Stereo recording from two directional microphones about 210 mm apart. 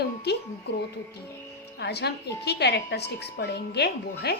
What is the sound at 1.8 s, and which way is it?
A woman's voice, 50° left (ahead or behind).